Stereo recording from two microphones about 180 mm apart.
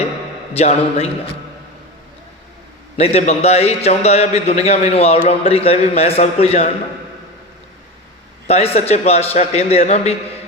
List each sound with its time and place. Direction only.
0.5 s a man's voice: 35° left (ahead or behind)
2.9 s a man's voice: 35° left (ahead or behind)
8.4 s a man's voice: 35° left (ahead or behind)